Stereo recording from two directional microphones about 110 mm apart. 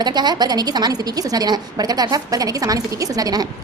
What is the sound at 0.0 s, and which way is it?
A woman's voice, 40° right (ahead or behind).